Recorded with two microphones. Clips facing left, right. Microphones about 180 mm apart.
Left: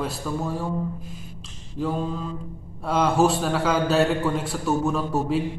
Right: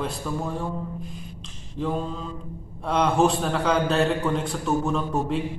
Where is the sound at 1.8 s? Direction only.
5° left (ahead or behind).